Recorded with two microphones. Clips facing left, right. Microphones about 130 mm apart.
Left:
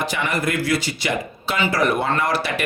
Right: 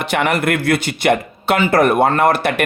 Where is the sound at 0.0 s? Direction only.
60° right (ahead or behind).